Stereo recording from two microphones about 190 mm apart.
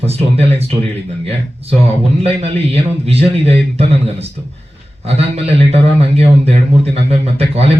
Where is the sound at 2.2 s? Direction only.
30° right (ahead or behind).